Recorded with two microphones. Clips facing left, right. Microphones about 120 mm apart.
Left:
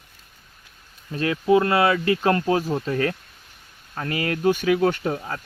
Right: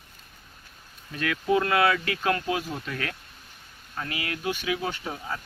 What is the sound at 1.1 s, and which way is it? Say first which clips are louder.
Speech: left 6 dB; 30° left (ahead or behind).